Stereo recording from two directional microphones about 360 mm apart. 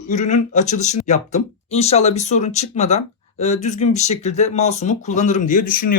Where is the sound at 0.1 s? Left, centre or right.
Centre.